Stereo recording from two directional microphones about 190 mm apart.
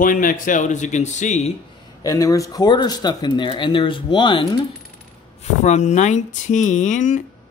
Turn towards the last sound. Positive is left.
turn(degrees=40)  # may be behind; listen again after turning